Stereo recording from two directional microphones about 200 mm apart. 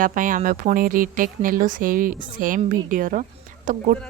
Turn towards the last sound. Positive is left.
turn(degrees=-40)  # may be behind; listen again after turning